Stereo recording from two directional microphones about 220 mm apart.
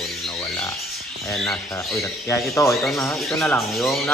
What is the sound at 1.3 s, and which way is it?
Speech, centre (ahead or behind).